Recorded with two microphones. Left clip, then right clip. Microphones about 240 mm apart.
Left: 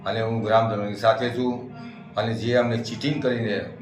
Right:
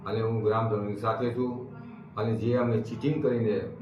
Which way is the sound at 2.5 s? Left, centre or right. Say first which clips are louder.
Left 6 dB; left.